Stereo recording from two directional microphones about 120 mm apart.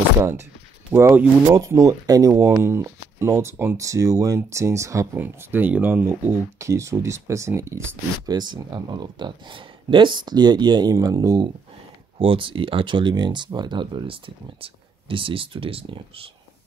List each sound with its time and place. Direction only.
0.2 s speech: 25° right (ahead or behind)
6.6 s speech: 25° right (ahead or behind)
8.3 s speech: 40° right (ahead or behind)
12.2 s speech: 45° right (ahead or behind)